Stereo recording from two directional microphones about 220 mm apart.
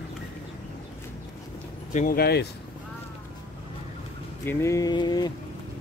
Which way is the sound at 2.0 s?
40° left (ahead or behind).